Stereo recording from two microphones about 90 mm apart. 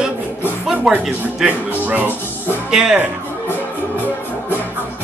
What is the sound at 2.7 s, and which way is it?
Speech, 5° right (ahead or behind).